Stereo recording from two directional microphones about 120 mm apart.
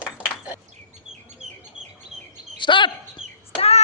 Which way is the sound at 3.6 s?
60° left (ahead or behind).